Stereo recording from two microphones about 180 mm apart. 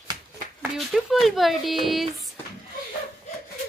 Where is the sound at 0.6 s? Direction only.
Centre (ahead or behind).